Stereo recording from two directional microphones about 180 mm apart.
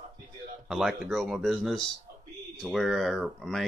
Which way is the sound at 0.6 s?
Centre (ahead or behind).